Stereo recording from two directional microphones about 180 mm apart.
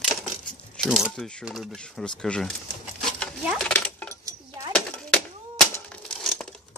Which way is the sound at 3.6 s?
10° left (ahead or behind).